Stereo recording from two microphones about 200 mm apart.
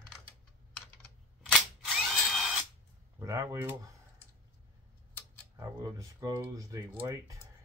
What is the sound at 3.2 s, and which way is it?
Speech, 15° right (ahead or behind).